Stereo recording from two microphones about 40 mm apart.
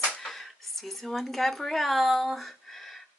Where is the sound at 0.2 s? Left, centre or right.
Centre.